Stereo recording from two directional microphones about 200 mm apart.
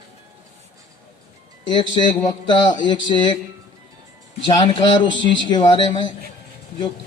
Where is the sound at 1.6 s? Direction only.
25° left (ahead or behind).